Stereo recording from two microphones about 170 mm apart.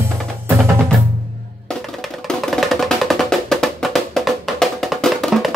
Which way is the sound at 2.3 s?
Centre (ahead or behind).